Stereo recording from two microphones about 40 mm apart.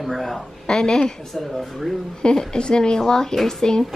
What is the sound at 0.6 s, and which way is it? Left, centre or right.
Speech, centre.